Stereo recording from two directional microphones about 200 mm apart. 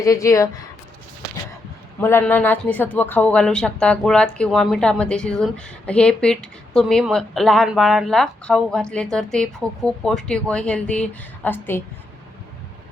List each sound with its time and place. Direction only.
0.0 s speech: 15° left (ahead or behind)
2.0 s speech: 10° left (ahead or behind)